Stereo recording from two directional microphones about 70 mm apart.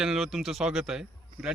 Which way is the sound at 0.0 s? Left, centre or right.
Centre.